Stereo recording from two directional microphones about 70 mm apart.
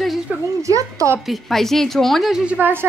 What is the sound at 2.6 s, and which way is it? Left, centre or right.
Speech, right.